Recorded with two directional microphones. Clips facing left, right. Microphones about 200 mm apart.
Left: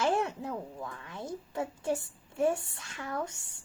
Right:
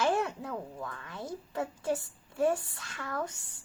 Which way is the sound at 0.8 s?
25° left (ahead or behind).